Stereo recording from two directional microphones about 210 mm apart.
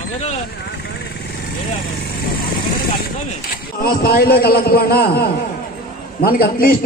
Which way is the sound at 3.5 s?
45° left (ahead or behind).